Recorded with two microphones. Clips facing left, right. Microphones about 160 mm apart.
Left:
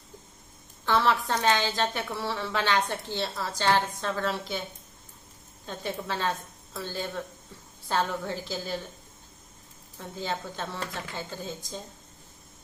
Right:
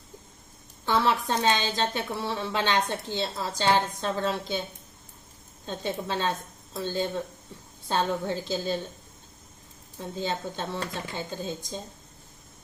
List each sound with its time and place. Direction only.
0.9 s a woman's voice: 15° right (ahead or behind)
5.6 s a woman's voice: 20° right (ahead or behind)
10.0 s a woman's voice: 20° right (ahead or behind)